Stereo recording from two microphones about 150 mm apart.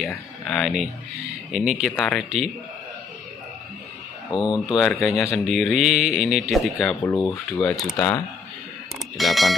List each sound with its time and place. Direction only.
0.5 s speech: centre (ahead or behind)
4.3 s speech: 30° left (ahead or behind)
4.6 s speech: centre (ahead or behind)
7.0 s speech: 20° left (ahead or behind)
7.6 s speech: centre (ahead or behind)
9.1 s speech: centre (ahead or behind)